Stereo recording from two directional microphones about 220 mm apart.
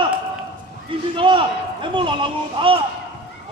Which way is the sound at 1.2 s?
20° right (ahead or behind).